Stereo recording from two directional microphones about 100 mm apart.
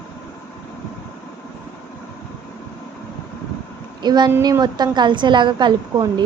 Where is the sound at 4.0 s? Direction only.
45° right (ahead or behind).